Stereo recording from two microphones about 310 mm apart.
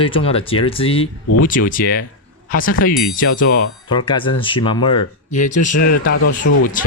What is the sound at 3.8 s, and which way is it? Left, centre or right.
Speech, centre.